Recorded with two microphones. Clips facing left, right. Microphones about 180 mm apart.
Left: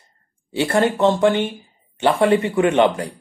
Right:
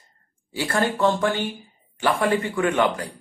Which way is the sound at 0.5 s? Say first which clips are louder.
Left 6 dB; 25° left (ahead or behind).